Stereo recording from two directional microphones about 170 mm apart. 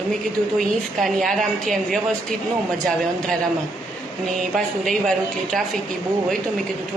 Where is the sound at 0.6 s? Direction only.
Centre (ahead or behind).